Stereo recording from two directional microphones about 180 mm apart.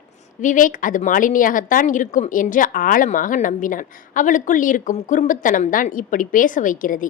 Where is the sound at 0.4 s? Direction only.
45° left (ahead or behind).